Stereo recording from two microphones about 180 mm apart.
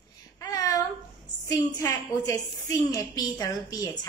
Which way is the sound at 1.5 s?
15° left (ahead or behind).